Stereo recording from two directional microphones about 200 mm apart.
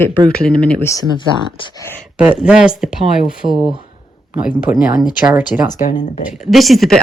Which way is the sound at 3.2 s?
25° right (ahead or behind).